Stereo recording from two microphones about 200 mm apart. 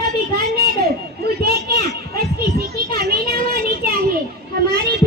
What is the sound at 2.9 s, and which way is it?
Speech, 50° right (ahead or behind).